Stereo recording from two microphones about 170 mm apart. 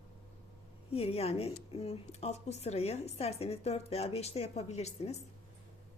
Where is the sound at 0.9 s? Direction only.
35° left (ahead or behind).